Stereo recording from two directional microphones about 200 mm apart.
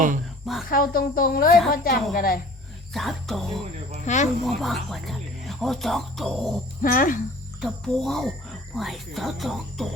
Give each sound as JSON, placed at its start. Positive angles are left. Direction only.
{"t": 0.7, "sound": "speech", "side_deg": 45}
{"t": 2.9, "sound": "speech", "side_deg": 0}
{"t": 4.0, "sound": "speech", "side_deg": 35}
{"t": 4.4, "sound": "speech", "side_deg": 0}
{"t": 6.8, "sound": "speech", "side_deg": 40}
{"t": 7.6, "sound": "speech", "side_deg": 0}